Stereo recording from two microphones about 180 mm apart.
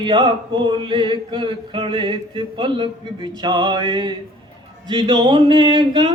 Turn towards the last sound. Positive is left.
turn(degrees=-25)  # may be behind; listen again after turning